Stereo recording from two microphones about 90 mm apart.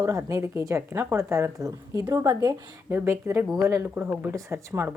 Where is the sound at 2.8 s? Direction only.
30° right (ahead or behind).